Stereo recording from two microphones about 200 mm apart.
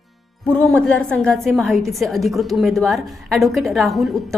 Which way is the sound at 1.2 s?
5° left (ahead or behind).